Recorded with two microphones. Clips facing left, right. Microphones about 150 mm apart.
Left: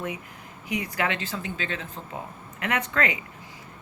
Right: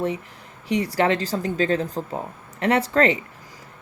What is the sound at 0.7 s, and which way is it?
Speech, 35° right (ahead or behind).